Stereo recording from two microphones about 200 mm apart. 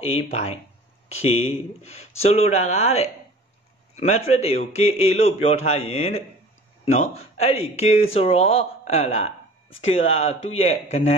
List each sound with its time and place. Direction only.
0.3 s a man's voice: 30° left (ahead or behind)